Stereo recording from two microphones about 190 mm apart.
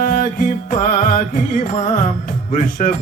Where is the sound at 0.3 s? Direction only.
45° left (ahead or behind).